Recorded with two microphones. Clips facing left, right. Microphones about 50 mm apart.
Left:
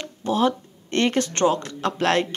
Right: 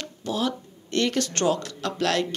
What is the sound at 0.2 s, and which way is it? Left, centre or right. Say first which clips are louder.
Speech: left 6 dB; left.